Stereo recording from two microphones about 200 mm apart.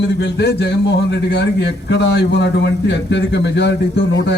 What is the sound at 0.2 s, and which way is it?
Speech, 60° left (ahead or behind).